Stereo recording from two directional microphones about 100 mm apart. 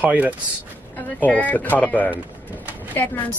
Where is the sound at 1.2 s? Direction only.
15° left (ahead or behind).